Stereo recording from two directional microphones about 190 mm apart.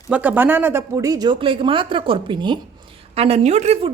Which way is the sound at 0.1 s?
10° right (ahead or behind).